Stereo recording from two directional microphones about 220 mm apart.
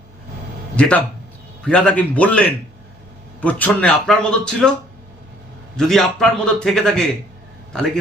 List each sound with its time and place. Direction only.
0.8 s a man's voice: 5° left (ahead or behind)
5.7 s a man's voice: centre (ahead or behind)